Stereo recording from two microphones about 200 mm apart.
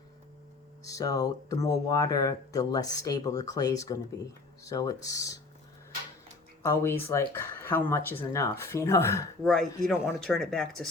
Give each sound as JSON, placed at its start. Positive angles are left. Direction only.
{"t": 0.9, "sound": "speech", "side_deg": 15}
{"t": 6.6, "sound": "speech", "side_deg": 15}
{"t": 9.4, "sound": "speech", "side_deg": 0}